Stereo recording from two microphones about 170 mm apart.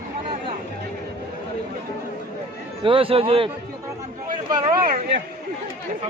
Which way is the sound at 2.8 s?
30° right (ahead or behind).